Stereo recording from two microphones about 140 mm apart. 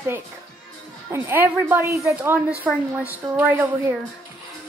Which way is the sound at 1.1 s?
15° right (ahead or behind).